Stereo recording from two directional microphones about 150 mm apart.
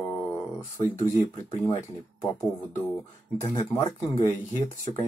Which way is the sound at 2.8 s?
15° left (ahead or behind).